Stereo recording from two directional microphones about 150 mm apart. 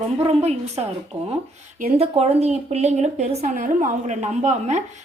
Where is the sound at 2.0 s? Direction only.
45° right (ahead or behind).